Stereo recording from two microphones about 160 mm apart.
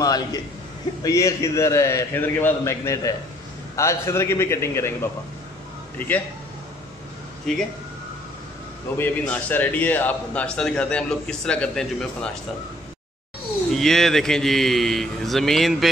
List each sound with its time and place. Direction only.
0.0 s a sound: 25° left (ahead or behind)
1.0 s a man's voice: 20° left (ahead or behind)
7.5 s speech: 5° left (ahead or behind)
8.9 s a man's voice: 10° left (ahead or behind)
13.7 s speech: centre (ahead or behind)